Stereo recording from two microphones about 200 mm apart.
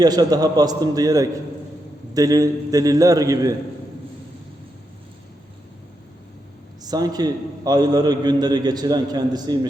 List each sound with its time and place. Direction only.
0.0 s a man's voice: 20° right (ahead or behind)
6.8 s a man's voice: 20° right (ahead or behind)